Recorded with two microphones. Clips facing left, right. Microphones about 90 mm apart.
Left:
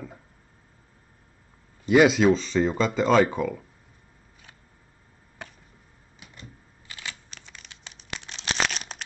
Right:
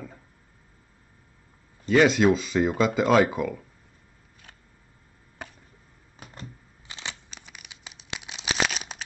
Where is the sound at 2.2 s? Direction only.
5° right (ahead or behind).